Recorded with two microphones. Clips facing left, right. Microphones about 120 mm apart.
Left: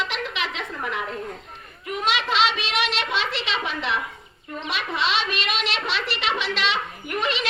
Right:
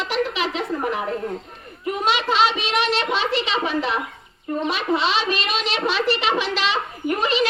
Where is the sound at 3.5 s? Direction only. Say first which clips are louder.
Right 4 dB; 40° right (ahead or behind).